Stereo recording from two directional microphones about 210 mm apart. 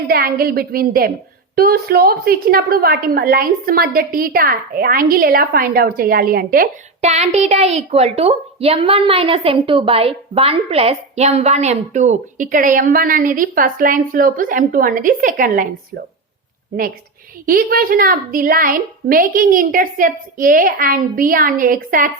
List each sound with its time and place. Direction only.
0.1 s a woman's voice: 45° right (ahead or behind)
17.4 s a woman's voice: 40° right (ahead or behind)